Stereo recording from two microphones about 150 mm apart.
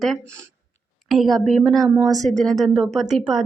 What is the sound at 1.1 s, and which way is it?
Speech, centre (ahead or behind).